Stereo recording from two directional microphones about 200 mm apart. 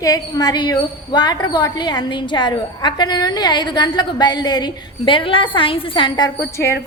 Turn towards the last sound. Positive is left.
turn(degrees=15)  # may be behind; listen again after turning